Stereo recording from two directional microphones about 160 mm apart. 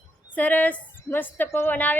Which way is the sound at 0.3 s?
10° left (ahead or behind).